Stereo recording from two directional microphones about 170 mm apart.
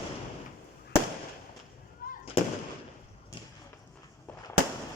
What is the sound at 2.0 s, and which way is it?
Fireworks, 60° left (ahead or behind).